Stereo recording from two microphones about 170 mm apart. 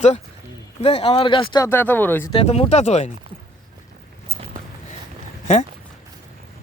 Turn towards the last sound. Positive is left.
turn(degrees=40)  # may be behind; listen again after turning